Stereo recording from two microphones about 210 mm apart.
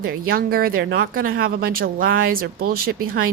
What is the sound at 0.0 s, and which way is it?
Speech, 45° right (ahead or behind).